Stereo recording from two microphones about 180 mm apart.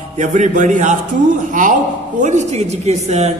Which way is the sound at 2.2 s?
40° right (ahead or behind).